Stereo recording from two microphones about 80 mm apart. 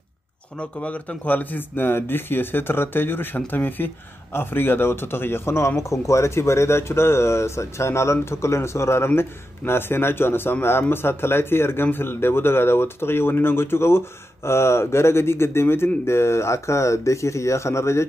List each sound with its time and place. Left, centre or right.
0.8 s speech: centre; by 18.0 s left